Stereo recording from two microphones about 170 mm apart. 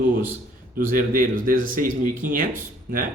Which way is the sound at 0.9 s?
55° right (ahead or behind).